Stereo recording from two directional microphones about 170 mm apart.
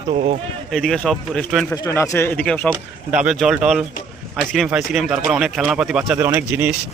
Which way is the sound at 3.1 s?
5° right (ahead or behind).